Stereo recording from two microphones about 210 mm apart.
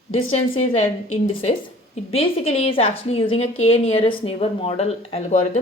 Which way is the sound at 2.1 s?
30° left (ahead or behind).